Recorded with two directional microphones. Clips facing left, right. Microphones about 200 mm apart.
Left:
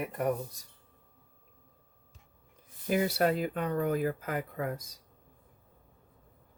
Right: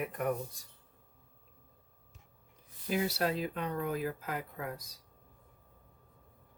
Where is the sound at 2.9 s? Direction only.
55° left (ahead or behind).